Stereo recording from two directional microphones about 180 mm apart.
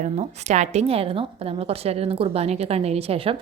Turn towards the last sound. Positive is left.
turn(degrees=-30)  # may be behind; listen again after turning